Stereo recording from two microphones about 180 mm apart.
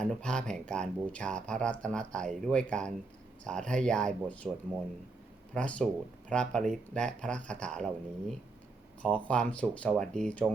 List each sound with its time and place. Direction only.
0.0 s speech: 5° left (ahead or behind)